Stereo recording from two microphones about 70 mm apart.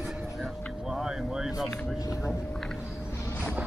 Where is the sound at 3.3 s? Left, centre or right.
Left.